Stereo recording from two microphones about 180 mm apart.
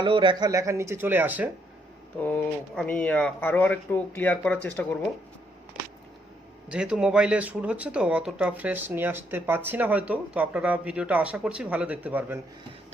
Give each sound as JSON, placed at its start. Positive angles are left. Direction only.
{"t": 0.0, "sound": "speech", "side_deg": -25}
{"t": 2.2, "sound": "speech", "side_deg": 10}
{"t": 6.7, "sound": "speech", "side_deg": -5}